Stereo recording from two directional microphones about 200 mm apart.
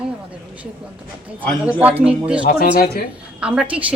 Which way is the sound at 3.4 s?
5° right (ahead or behind).